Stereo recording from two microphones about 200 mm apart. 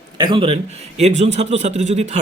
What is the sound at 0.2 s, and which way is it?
Speech, 25° right (ahead or behind).